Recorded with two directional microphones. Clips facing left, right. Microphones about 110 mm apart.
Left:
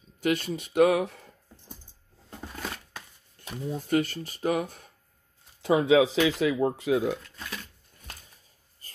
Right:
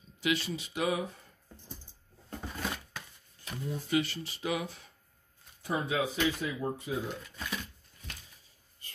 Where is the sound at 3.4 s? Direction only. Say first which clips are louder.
Left 2 dB; 60° left (ahead or behind).